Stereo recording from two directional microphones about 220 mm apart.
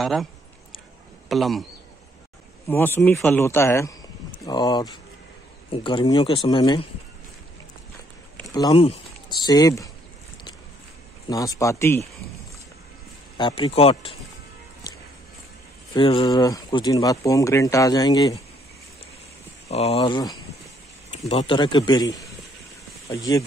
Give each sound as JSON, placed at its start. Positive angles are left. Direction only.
{"t": 0.0, "sound": "speech", "side_deg": 0}
{"t": 1.3, "sound": "speech", "side_deg": 0}
{"t": 2.7, "sound": "speech", "side_deg": 10}
{"t": 8.5, "sound": "speech", "side_deg": 20}
{"t": 11.2, "sound": "speech", "side_deg": 15}
{"t": 13.4, "sound": "speech", "side_deg": 25}
{"t": 15.9, "sound": "speech", "side_deg": 25}
{"t": 19.7, "sound": "speech", "side_deg": 30}